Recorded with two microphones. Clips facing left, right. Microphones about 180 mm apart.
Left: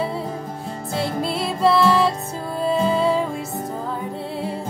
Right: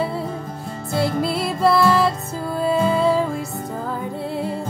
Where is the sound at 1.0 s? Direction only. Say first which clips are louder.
Right 2 dB; 5° right (ahead or behind).